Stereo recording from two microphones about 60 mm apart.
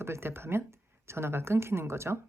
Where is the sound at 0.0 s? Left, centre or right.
Right.